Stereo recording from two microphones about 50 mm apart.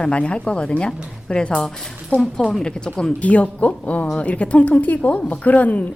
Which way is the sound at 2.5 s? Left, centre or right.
Centre.